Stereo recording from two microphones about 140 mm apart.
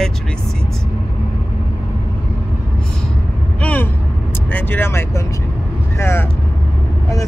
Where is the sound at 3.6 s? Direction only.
10° left (ahead or behind).